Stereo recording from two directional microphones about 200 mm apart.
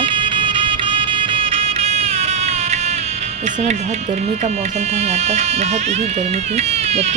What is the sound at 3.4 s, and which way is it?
Speech, 35° right (ahead or behind).